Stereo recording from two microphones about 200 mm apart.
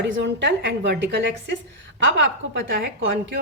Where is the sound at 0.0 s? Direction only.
60° right (ahead or behind).